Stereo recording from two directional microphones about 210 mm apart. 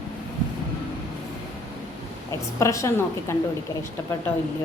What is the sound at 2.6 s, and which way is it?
Speech, 15° left (ahead or behind).